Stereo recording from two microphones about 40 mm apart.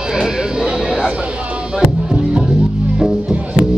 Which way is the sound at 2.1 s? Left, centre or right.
Centre.